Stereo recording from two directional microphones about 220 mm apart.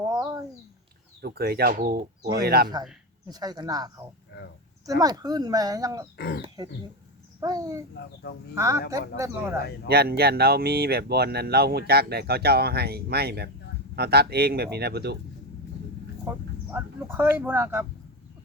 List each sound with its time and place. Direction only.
0.1 s a sound: 15° right (ahead or behind)
1.2 s speech: 45° right (ahead or behind)
3.2 s speech: 20° right (ahead or behind)
6.1 s speech: 45° left (ahead or behind)
7.3 s a child's voice: 15° right (ahead or behind)
9.8 s speech: 45° right (ahead or behind)
16.2 s speech: 10° right (ahead or behind)